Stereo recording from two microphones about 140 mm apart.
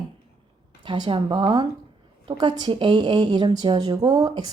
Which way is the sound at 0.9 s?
35° right (ahead or behind).